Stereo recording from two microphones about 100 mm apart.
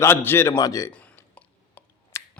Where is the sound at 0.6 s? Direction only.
35° left (ahead or behind).